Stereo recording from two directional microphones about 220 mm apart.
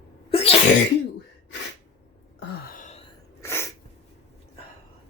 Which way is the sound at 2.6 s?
35° left (ahead or behind).